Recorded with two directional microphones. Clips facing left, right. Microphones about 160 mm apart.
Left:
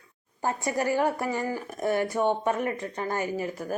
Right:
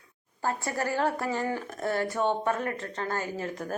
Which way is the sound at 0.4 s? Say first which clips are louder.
Left 3 dB; 15° left (ahead or behind).